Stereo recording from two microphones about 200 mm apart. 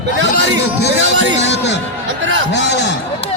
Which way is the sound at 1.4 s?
60° left (ahead or behind).